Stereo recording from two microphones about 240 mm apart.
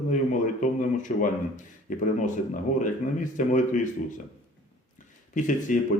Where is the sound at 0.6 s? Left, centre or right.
Left.